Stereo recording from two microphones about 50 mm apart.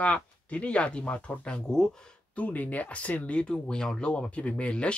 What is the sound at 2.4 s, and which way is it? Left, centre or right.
Speech, left.